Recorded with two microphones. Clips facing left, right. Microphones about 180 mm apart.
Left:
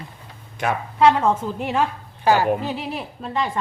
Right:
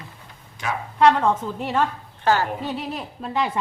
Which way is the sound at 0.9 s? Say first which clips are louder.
Even; 5° left (ahead or behind).